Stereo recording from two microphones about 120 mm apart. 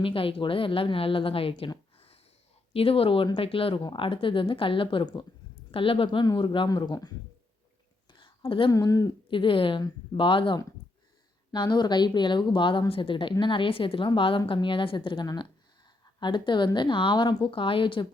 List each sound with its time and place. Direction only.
0.0 s a woman's voice: 50° left (ahead or behind)
8.1 s a sound: 40° left (ahead or behind)
8.7 s a woman's voice: 30° left (ahead or behind)
9.3 s a woman's voice: 45° left (ahead or behind)